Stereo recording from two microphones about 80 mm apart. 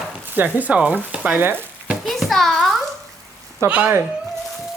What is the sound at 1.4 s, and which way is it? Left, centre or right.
Speech, right.